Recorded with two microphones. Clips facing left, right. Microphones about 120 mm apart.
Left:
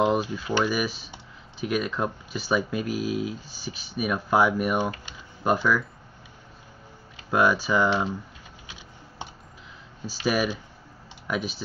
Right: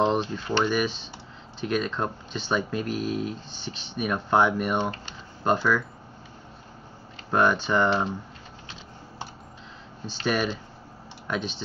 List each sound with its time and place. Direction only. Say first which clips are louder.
0.0 s speech: left 1 dB; 10° left (ahead or behind)
7.2 s speech: even; 5° left (ahead or behind)
10.0 s speech: left 1 dB; 5° left (ahead or behind)